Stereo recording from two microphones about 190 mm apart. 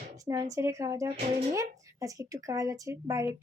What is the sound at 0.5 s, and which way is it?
Speech, 15° right (ahead or behind).